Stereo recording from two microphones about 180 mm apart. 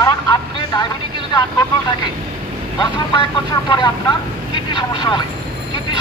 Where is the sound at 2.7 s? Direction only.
25° left (ahead or behind).